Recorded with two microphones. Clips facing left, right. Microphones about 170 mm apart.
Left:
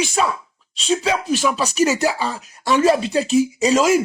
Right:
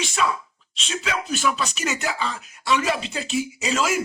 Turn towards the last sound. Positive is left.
turn(degrees=35)  # may be behind; listen again after turning